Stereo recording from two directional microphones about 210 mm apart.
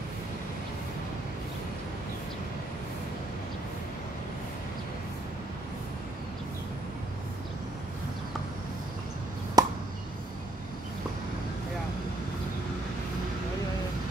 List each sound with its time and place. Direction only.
9.6 s chop: 20° right (ahead or behind)